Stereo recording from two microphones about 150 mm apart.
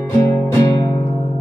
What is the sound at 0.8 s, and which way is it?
Music, 20° left (ahead or behind).